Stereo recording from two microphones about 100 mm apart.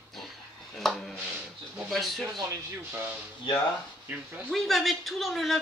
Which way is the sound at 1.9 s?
Centre (ahead or behind).